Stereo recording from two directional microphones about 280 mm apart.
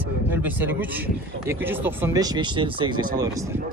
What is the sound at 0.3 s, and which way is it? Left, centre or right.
Speech, centre.